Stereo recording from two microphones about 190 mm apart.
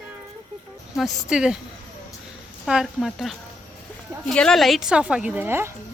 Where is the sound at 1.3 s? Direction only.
5° right (ahead or behind).